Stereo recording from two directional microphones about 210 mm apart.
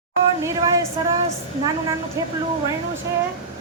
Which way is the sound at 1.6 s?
15° right (ahead or behind).